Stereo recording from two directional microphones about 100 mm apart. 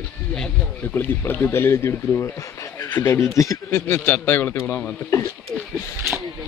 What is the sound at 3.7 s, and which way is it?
A man's voice, 20° left (ahead or behind).